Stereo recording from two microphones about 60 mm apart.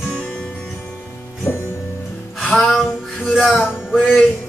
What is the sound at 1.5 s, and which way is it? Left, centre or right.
Music, left.